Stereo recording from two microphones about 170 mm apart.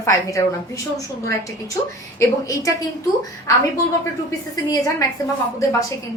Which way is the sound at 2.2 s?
20° left (ahead or behind).